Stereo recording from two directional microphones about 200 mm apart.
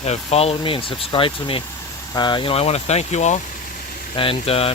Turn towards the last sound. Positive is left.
turn(degrees=30)  # may be behind; listen again after turning